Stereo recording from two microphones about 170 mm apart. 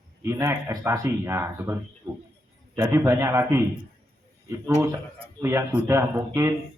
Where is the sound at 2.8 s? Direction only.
15° right (ahead or behind).